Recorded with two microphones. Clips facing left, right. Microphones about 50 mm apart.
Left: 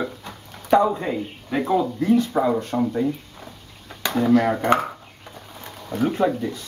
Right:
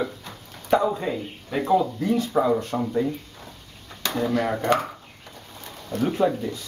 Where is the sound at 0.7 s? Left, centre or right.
Centre.